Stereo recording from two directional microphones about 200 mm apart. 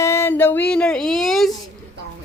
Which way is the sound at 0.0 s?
15° left (ahead or behind).